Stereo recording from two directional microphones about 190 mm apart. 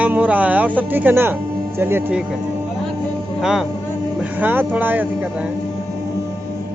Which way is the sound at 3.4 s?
5° right (ahead or behind).